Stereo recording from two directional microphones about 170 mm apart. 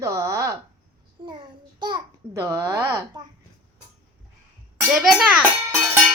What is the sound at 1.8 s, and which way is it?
A child's voice, 20° right (ahead or behind).